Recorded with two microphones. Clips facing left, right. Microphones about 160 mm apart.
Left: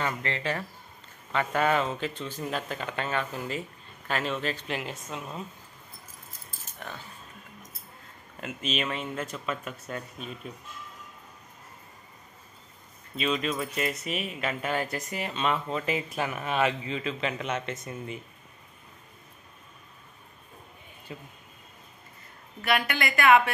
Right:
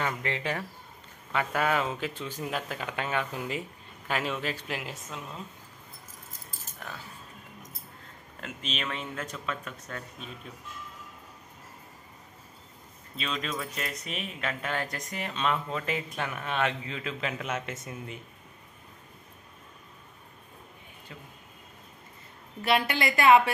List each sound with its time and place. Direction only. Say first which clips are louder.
0.0 s speech: left 1 dB; 10° right (ahead or behind)
8.4 s speech: left 5 dB; 5° left (ahead or behind)
13.1 s speech: left 5 dB; 5° left (ahead or behind)
21.1 s speech: left 6 dB; 10° left (ahead or behind)
22.6 s a woman's voice: right 1 dB; 30° right (ahead or behind)